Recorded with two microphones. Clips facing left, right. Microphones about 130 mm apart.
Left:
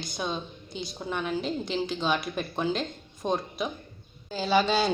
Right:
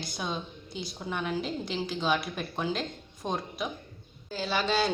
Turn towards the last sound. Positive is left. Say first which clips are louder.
# left 4 dB
turn(degrees=0)  # may be behind; listen again after turning